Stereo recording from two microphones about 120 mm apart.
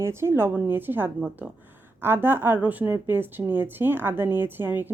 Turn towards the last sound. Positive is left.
turn(degrees=-15)  # may be behind; listen again after turning